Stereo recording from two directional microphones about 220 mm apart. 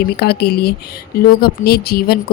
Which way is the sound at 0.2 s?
45° left (ahead or behind).